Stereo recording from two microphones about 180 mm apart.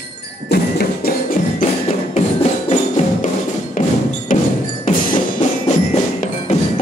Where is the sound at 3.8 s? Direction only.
50° left (ahead or behind).